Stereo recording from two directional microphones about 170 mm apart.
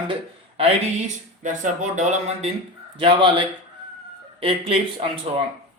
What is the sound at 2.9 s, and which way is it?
Speech, 30° right (ahead or behind).